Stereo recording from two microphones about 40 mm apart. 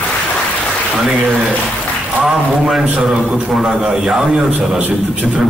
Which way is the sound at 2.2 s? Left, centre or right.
Centre.